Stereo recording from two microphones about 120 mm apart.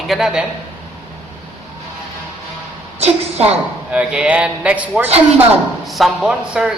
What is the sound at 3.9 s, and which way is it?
A man's voice, 10° right (ahead or behind).